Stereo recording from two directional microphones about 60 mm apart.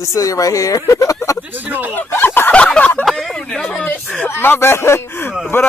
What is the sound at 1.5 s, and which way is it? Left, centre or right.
Speech, right.